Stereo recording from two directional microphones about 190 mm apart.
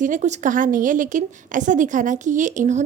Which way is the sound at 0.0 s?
40° right (ahead or behind).